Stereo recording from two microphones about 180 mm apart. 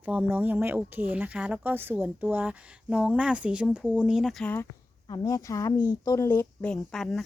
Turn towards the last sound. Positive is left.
turn(degrees=0)  # may be behind; listen again after turning